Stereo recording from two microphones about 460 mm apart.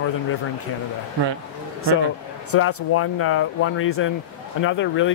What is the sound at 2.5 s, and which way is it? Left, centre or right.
Speech, left.